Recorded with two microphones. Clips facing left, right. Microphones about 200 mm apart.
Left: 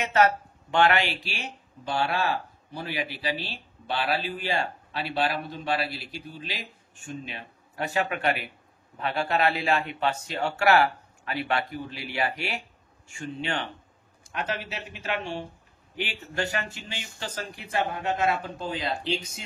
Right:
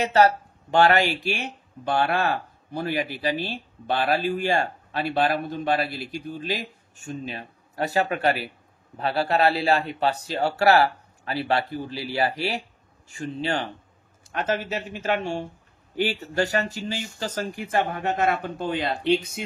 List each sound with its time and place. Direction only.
0.0 s speech: 35° right (ahead or behind); by 19.4 s 60° right (ahead or behind)